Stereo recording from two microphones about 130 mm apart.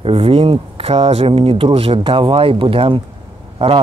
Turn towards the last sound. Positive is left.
turn(degrees=-45)  # may be behind; listen again after turning